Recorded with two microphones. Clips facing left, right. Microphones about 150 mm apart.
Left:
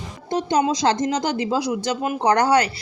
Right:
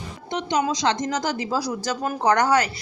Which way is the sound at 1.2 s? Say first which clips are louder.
Left 3 dB; 30° left (ahead or behind).